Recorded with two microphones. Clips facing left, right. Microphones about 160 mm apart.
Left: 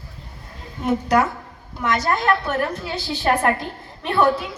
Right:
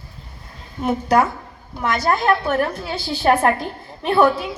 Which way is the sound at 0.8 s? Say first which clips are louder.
Right 1 dB; 30° right (ahead or behind).